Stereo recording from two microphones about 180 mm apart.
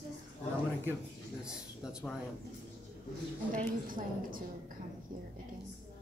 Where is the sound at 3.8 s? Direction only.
50° right (ahead or behind).